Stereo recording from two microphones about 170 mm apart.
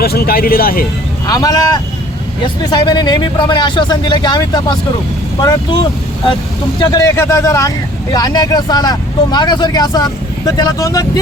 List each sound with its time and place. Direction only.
0.0 s speech: 65° left (ahead or behind)
1.3 s speech: 20° left (ahead or behind)
6.7 s speech: 20° left (ahead or behind)